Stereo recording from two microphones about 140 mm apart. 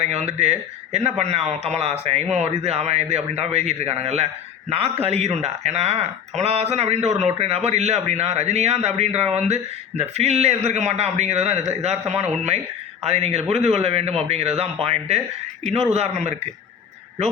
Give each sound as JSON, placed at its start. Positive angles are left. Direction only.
{"t": 0.0, "sound": "speech", "side_deg": -50}